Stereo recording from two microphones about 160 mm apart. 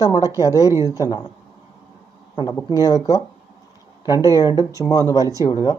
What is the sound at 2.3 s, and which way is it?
Speech, 25° left (ahead or behind).